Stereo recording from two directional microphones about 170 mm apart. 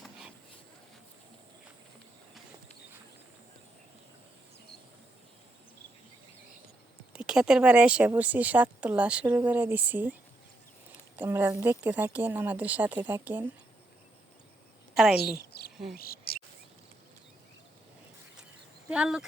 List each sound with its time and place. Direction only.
7.1 s speech: 5° right (ahead or behind)
11.2 s speech: 10° right (ahead or behind)
14.9 s a woman's voice: centre (ahead or behind)
15.4 s speech: 65° left (ahead or behind)
16.3 s a sound: 65° left (ahead or behind)
18.9 s a woman's voice: 5° right (ahead or behind)